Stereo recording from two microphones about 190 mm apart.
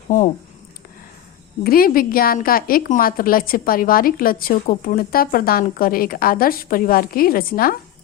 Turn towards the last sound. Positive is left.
turn(degrees=50)  # may be behind; listen again after turning